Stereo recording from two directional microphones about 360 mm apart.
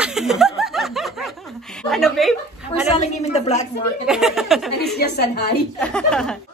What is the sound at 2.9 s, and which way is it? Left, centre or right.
Speech, centre.